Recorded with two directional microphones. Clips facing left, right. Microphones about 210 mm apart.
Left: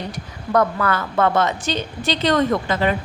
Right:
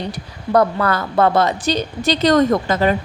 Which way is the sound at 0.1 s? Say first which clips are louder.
Right 3 dB; 35° right (ahead or behind).